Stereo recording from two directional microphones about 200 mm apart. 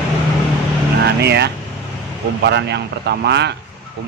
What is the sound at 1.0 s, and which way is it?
Vehicle, 55° right (ahead or behind).